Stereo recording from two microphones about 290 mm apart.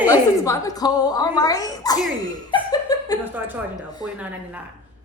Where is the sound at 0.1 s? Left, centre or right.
Centre.